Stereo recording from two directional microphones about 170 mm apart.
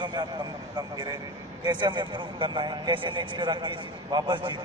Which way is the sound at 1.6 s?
25° right (ahead or behind).